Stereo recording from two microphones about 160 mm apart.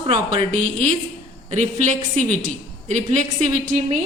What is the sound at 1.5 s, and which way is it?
A woman's voice, 50° right (ahead or behind).